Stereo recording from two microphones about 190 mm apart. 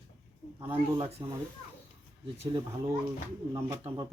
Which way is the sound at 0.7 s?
30° right (ahead or behind).